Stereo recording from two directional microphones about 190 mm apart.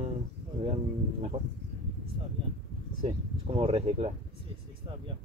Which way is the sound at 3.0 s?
25° right (ahead or behind).